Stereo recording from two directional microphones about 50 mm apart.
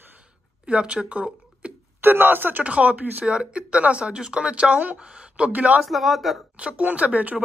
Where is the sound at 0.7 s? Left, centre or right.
Right.